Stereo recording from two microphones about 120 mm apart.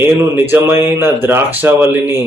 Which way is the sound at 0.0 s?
20° right (ahead or behind).